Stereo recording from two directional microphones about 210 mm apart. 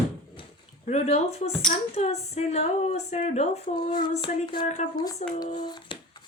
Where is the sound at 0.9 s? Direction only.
30° left (ahead or behind).